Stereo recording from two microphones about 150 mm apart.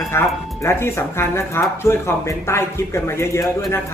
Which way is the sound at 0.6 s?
15° left (ahead or behind).